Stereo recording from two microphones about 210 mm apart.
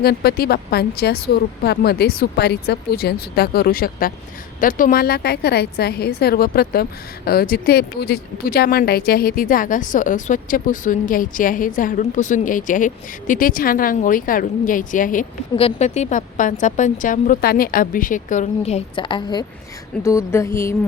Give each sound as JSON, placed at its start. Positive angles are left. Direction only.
{"t": 0.0, "sound": "a woman's voice", "side_deg": 50}